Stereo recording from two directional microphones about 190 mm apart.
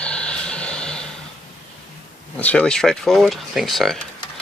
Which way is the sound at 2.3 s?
5° left (ahead or behind).